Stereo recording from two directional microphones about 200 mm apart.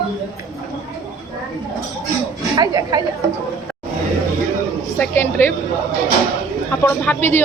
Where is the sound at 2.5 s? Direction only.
20° right (ahead or behind).